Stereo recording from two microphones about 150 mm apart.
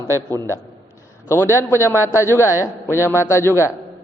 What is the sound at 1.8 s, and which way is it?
A man's voice, 20° left (ahead or behind).